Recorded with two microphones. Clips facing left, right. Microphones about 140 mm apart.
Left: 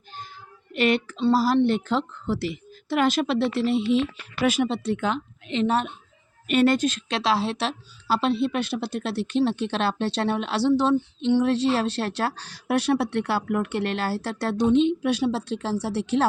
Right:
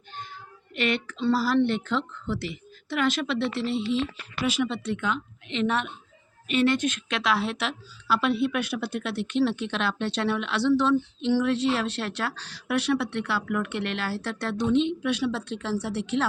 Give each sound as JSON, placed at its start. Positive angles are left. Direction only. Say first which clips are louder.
{"t": 0.7, "sound": "a woman's voice", "louder": "left 5 dB", "side_deg": 40}
{"t": 4.4, "sound": "a woman's voice", "louder": "left 4 dB", "side_deg": 45}